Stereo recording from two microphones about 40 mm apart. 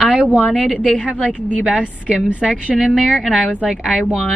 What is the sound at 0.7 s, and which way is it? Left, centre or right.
Speech, left.